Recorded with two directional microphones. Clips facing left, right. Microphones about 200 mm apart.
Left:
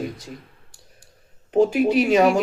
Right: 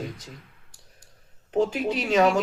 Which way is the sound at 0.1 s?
35° left (ahead or behind).